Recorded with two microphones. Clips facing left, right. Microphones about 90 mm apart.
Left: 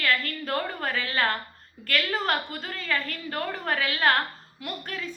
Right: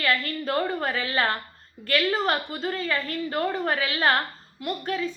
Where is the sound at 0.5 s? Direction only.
25° right (ahead or behind).